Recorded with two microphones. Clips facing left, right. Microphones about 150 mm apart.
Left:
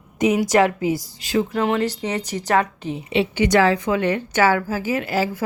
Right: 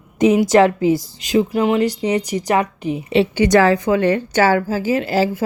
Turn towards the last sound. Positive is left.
turn(degrees=-30)  # may be behind; listen again after turning